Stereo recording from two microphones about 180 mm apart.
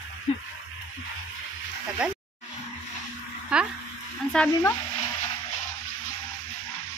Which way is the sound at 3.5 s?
5° right (ahead or behind).